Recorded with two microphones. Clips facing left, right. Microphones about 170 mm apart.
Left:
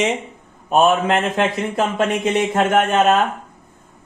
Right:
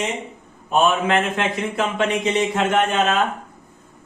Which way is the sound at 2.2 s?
50° left (ahead or behind).